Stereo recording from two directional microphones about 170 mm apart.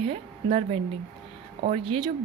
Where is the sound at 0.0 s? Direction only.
35° right (ahead or behind).